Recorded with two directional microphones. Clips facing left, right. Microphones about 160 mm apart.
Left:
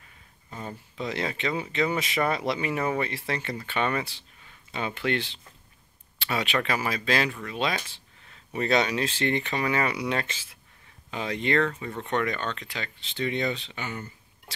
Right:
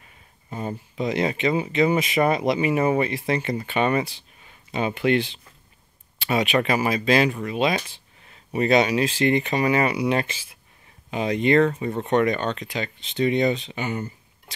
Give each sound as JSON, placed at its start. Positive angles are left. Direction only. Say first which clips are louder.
{"t": 0.5, "sound": "speech", "louder": "right 7 dB", "side_deg": -20}